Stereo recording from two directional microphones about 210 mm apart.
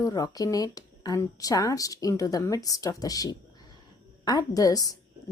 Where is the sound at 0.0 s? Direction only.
15° left (ahead or behind).